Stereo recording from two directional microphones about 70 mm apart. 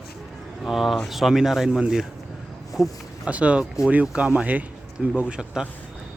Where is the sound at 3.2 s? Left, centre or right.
Centre.